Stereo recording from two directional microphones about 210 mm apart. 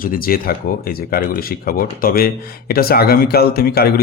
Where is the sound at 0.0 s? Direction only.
45° left (ahead or behind).